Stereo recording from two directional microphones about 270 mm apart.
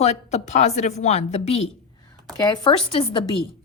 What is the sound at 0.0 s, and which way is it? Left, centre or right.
A woman's voice, left.